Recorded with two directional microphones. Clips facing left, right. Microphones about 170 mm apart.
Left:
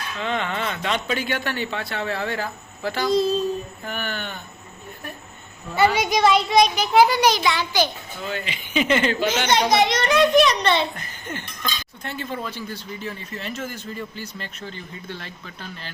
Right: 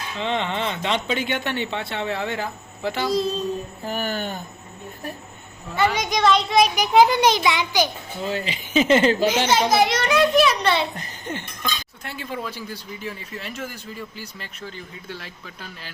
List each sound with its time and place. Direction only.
0.2 s speech: 25° right (ahead or behind)
3.1 s a child's voice: centre (ahead or behind)
3.8 s a man's voice: 40° right (ahead or behind)
5.7 s a child's voice: 10° left (ahead or behind)
6.6 s speech: 15° right (ahead or behind)
8.2 s a man's voice: 35° right (ahead or behind)
9.5 s a child's voice: 5° right (ahead or behind)
10.9 s speech: 35° right (ahead or behind)
12.0 s speech: 10° right (ahead or behind)